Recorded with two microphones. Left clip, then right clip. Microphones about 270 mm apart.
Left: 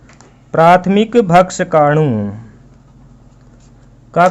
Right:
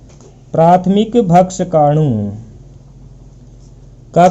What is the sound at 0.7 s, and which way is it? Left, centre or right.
Speech, centre.